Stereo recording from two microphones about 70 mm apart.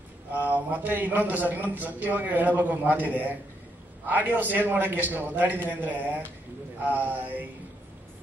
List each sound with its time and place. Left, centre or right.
0.3 s a man's voice: right